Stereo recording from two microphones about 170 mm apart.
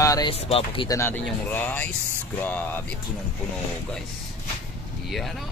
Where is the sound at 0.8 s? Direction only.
15° left (ahead or behind).